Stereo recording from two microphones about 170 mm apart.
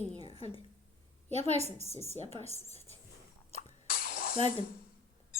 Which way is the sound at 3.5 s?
60° left (ahead or behind).